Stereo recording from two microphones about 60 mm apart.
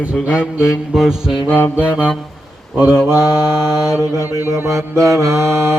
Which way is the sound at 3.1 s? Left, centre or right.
Right.